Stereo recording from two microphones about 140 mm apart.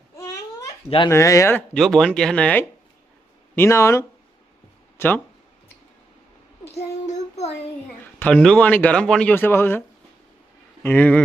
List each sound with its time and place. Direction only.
0.9 s speech: 35° left (ahead or behind)
1.1 s speech: 20° left (ahead or behind)
1.7 s speech: centre (ahead or behind)
6.7 s child singing: 50° left (ahead or behind)
8.2 s speech: 5° left (ahead or behind)
10.8 s speech: 10° left (ahead or behind)